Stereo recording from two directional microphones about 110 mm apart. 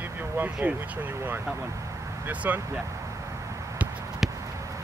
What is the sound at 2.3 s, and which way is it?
Speech, 15° right (ahead or behind).